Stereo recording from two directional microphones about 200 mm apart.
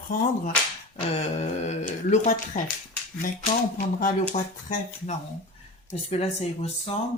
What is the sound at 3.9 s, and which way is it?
Speech, 40° left (ahead or behind).